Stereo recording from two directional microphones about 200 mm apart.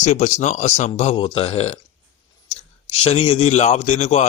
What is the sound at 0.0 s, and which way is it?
Speech, 35° left (ahead or behind).